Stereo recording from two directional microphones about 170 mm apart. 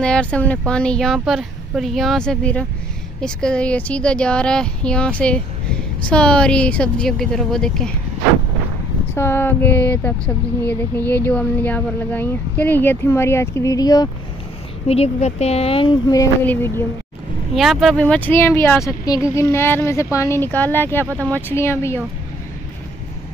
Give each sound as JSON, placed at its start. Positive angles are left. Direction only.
{"t": 0.0, "sound": "speech", "side_deg": 5}
{"t": 9.1, "sound": "speech", "side_deg": 15}
{"t": 14.9, "sound": "speech", "side_deg": 40}
{"t": 16.4, "sound": "speech", "side_deg": 15}
{"t": 17.6, "sound": "speech", "side_deg": 0}